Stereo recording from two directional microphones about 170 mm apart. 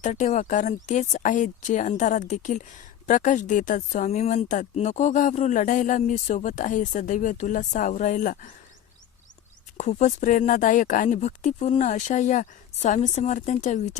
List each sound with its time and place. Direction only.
0.0 s speech: 45° left (ahead or behind)
9.7 s speech: 45° left (ahead or behind)